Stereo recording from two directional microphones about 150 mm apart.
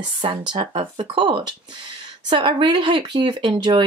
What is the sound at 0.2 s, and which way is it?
A woman's voice, 30° right (ahead or behind).